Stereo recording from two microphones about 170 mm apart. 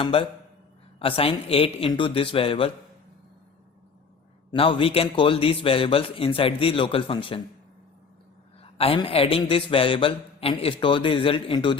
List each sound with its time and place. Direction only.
0.0 s a man's voice: 30° left (ahead or behind)
4.5 s a man's voice: 30° left (ahead or behind)
8.6 s a man's voice: 35° left (ahead or behind)